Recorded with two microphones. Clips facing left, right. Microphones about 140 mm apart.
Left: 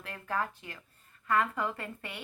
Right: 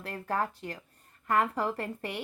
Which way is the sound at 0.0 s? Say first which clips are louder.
Right 3 dB; 40° right (ahead or behind).